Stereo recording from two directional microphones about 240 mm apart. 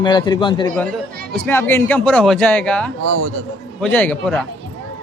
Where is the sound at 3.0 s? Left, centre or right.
Right.